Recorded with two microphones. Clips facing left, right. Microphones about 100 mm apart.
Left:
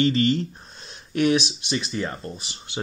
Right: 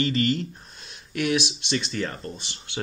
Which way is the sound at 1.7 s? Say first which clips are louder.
Left 1 dB; 15° left (ahead or behind).